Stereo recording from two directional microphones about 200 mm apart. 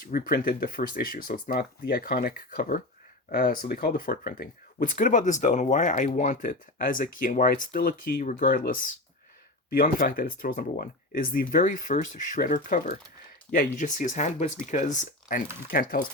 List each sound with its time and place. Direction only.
0.0 s speech: 50° left (ahead or behind)